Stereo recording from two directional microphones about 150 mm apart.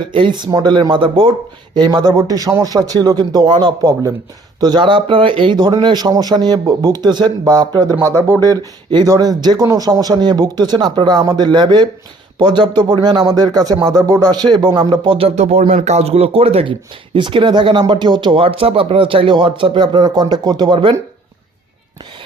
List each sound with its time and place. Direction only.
0.1 s speech: 30° right (ahead or behind)
15.4 s speech: 45° right (ahead or behind); by 20.9 s 30° right (ahead or behind)